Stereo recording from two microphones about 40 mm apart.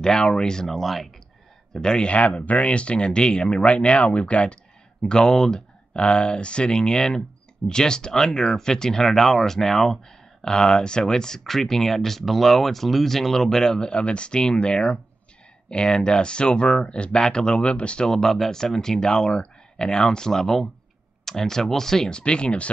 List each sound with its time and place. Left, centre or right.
0.0 s speech: left
0.7 s speech: centre
1.7 s a man's voice: centre
2.0 s speech: left
5.0 s speech: centre
18.0 s speech: centre